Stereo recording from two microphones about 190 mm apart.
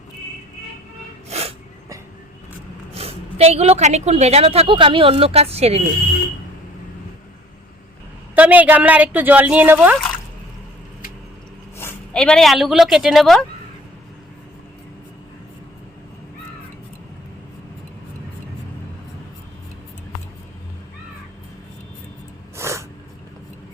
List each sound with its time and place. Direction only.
1.3 s sneeze: 35° right (ahead or behind)
2.9 s a woman's voice: 30° right (ahead or behind)
8.4 s speech: 10° right (ahead or behind)
11.8 s a woman's voice: 10° left (ahead or behind)
22.5 s snort: 15° right (ahead or behind)